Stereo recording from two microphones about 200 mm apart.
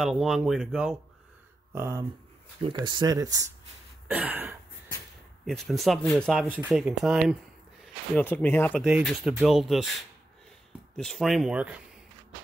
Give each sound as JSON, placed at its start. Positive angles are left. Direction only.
{"t": 0.0, "sound": "speech", "side_deg": 0}
{"t": 1.7, "sound": "a sound", "side_deg": -15}
{"t": 2.6, "sound": "speech", "side_deg": -20}
{"t": 4.1, "sound": "a sound", "side_deg": -10}
{"t": 5.4, "sound": "speech", "side_deg": 0}
{"t": 8.2, "sound": "speech", "side_deg": 10}
{"t": 8.8, "sound": "speech", "side_deg": -5}